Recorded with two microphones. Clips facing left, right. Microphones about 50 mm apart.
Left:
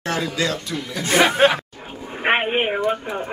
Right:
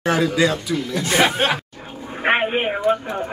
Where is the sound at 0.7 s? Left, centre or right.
Centre.